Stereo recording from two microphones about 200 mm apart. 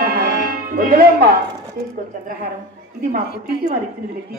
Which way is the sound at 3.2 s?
45° left (ahead or behind).